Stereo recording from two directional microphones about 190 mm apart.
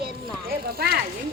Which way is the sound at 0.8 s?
55° right (ahead or behind).